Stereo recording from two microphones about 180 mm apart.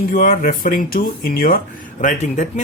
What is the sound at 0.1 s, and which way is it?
Speech, 50° left (ahead or behind).